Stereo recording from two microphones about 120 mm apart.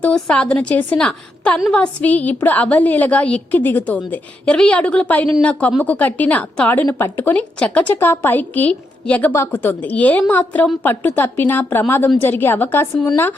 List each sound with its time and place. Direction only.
0.0 s a woman's voice: 10° left (ahead or behind)